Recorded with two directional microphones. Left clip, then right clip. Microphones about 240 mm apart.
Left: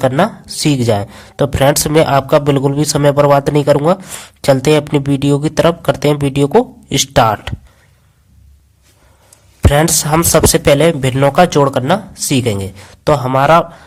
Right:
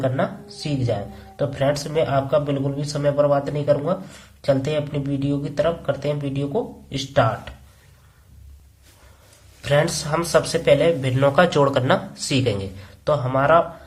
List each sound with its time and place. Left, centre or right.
0.0 s speech: left
9.6 s speech: left